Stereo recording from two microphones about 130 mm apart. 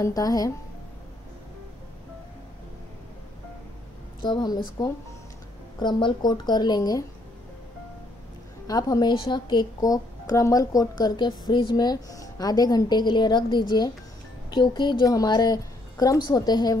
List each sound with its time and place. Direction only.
0.0 s speech: 30° left (ahead or behind)
4.2 s a woman's voice: 35° left (ahead or behind)
8.6 s a woman's voice: 30° left (ahead or behind)